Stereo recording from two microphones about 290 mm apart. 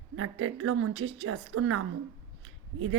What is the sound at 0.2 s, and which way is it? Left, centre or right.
A woman's voice, right.